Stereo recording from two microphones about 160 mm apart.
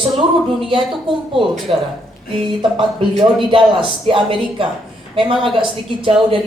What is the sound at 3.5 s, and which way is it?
A woman's voice, 30° right (ahead or behind).